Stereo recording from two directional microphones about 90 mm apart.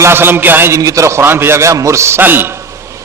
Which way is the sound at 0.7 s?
35° right (ahead or behind).